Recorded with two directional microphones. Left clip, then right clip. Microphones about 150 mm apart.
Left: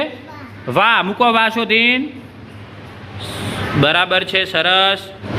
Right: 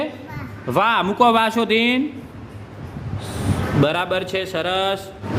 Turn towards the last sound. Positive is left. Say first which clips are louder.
# left 7 dB
turn(degrees=-10)  # may be behind; listen again after turning